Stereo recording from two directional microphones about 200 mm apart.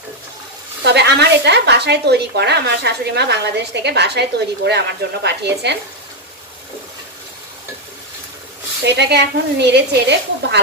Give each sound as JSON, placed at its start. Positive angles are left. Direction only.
{"t": 0.8, "sound": "speech", "side_deg": -55}
{"t": 8.8, "sound": "speech", "side_deg": -55}